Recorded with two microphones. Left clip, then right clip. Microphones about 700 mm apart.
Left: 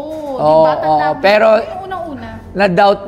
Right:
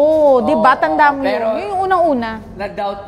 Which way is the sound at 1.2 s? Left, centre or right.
Left.